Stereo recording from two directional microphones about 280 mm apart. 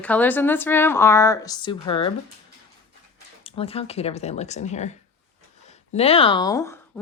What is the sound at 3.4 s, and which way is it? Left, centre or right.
A woman's voice, centre.